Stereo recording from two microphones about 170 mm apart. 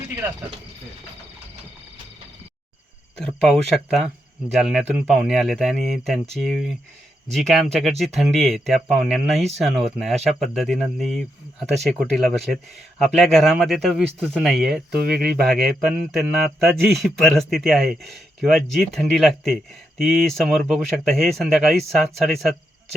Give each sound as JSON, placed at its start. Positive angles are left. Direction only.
{"t": 3.2, "sound": "speech", "side_deg": 0}
{"t": 14.9, "sound": "speech", "side_deg": -70}
{"t": 15.4, "sound": "speech", "side_deg": 5}